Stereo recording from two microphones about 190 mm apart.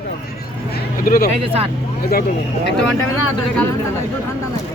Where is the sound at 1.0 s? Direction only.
45° left (ahead or behind).